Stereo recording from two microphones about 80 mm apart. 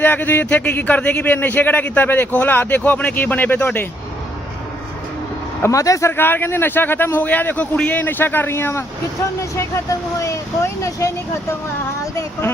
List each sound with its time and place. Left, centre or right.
0.0 s a man's voice: left
5.6 s a man's voice: left